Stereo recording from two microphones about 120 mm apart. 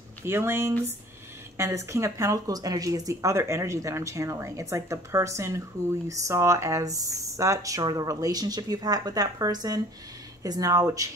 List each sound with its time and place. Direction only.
0.2 s speech: 20° right (ahead or behind)